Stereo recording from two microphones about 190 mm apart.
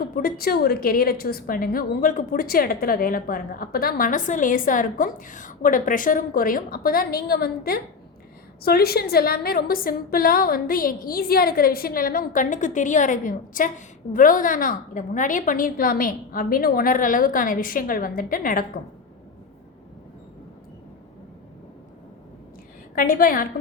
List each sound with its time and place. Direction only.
0.0 s a woman's voice: 50° left (ahead or behind)
23.0 s a woman's voice: 50° left (ahead or behind)